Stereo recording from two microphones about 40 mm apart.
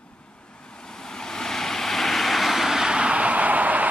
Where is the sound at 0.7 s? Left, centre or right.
Centre.